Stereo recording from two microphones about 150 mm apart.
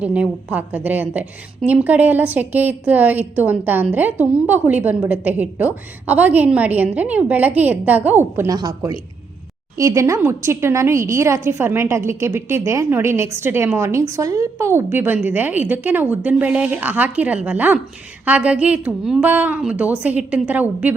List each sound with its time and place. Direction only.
0.0 s a woman's voice: 10° right (ahead or behind)